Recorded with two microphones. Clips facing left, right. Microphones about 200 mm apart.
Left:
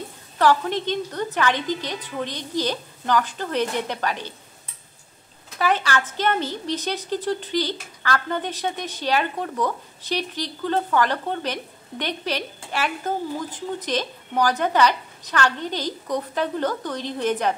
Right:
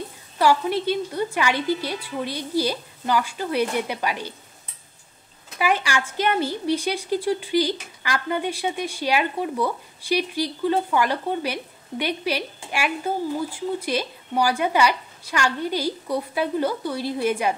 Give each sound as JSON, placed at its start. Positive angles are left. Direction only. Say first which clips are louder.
{"t": 0.4, "sound": "a woman's voice", "louder": "even", "side_deg": -10}
{"t": 5.6, "sound": "a woman's voice", "louder": "left 1 dB", "side_deg": -10}